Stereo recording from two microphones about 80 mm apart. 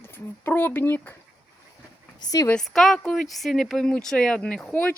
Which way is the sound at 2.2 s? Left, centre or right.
Left.